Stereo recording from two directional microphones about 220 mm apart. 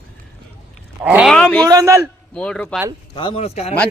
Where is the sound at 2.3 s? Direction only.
5° left (ahead or behind).